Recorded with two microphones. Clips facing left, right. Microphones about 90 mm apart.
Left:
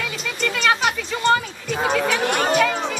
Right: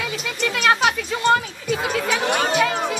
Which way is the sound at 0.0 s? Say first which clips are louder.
Right 1 dB; 5° right (ahead or behind).